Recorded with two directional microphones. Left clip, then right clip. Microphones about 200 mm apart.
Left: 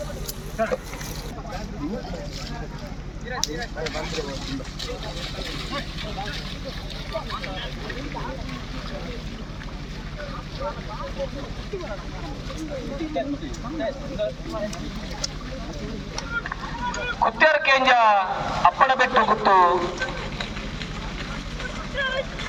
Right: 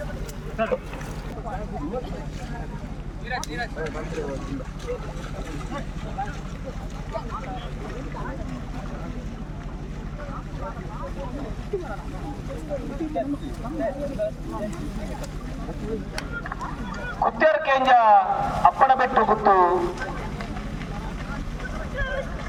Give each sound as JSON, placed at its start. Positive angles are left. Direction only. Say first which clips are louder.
{"t": 0.6, "sound": "speech", "louder": "even", "side_deg": -45}
{"t": 13.2, "sound": "speech", "louder": "even", "side_deg": 0}
{"t": 17.1, "sound": "a man's voice", "louder": "left 1 dB", "side_deg": 5}
{"t": 21.9, "sound": "vehicle", "louder": "left 4 dB", "side_deg": 0}